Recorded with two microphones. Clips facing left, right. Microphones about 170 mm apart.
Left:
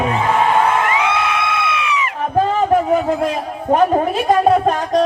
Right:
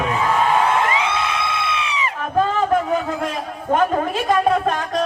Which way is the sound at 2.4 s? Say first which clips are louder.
Left 3 dB; 35° left (ahead or behind).